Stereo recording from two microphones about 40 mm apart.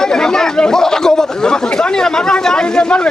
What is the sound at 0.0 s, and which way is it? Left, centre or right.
A man's voice, centre.